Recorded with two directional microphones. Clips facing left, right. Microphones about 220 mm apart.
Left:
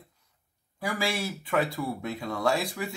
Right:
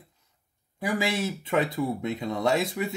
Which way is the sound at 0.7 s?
20° right (ahead or behind).